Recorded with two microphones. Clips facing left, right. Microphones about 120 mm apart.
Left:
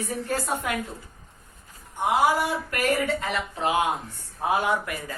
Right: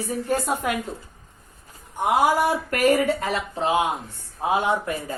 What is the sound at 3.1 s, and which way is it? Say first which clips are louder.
A woman's voice: right 3 dB; 30° right (ahead or behind).